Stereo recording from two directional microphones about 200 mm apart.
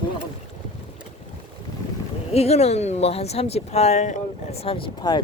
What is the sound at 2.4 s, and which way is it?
Speech, 30° left (ahead or behind).